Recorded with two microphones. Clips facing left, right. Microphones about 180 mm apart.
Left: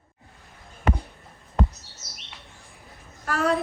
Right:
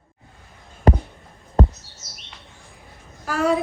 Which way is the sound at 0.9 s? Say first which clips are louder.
Right 7 dB; 35° right (ahead or behind).